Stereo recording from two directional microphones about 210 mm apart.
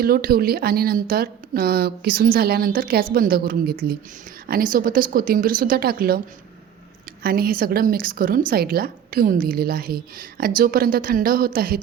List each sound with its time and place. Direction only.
0.0 s a woman's voice: 45° right (ahead or behind)